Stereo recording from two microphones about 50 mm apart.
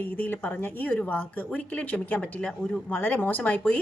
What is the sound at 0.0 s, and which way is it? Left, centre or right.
Speech, left.